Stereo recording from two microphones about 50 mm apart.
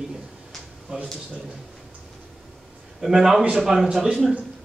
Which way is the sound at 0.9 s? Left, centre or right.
Centre.